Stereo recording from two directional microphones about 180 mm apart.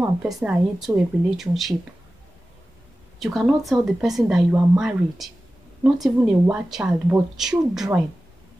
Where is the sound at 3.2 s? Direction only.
Centre (ahead or behind).